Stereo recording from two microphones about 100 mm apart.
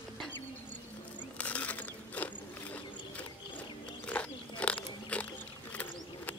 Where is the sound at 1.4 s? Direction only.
15° left (ahead or behind).